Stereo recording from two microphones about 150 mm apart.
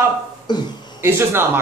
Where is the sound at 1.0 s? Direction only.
15° right (ahead or behind).